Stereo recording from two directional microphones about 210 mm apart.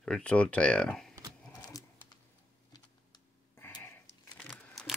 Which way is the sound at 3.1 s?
20° left (ahead or behind).